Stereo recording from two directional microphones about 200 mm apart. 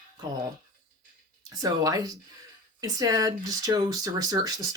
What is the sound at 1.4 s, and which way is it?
Speech, 20° right (ahead or behind).